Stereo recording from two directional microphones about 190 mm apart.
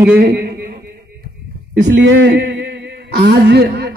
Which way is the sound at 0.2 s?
60° right (ahead or behind).